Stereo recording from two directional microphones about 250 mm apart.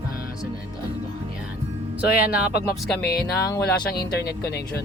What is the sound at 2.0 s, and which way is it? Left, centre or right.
Speech, left.